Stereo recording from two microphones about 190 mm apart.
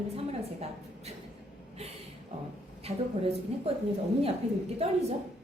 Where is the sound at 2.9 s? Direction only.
35° right (ahead or behind).